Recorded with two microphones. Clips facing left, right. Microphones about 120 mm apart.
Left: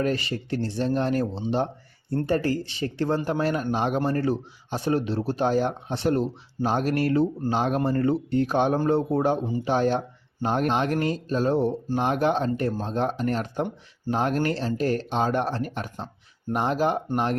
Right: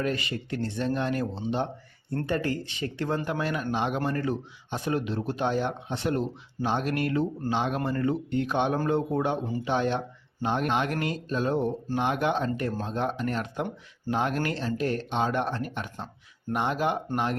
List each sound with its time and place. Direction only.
0.0 s a man's voice: 35° left (ahead or behind)